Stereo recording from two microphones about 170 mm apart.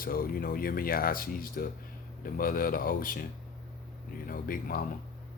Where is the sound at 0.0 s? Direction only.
60° left (ahead or behind).